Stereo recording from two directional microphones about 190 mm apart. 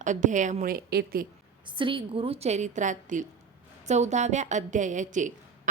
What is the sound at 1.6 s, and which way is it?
A woman's voice, 25° right (ahead or behind).